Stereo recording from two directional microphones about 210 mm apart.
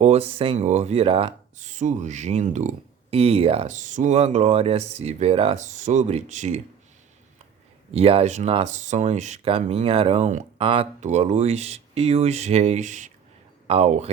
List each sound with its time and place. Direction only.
0.0 s speech: 30° right (ahead or behind)
7.9 s speech: 30° right (ahead or behind)